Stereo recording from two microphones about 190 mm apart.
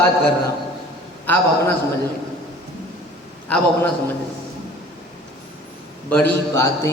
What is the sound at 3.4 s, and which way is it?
Speech, 10° left (ahead or behind).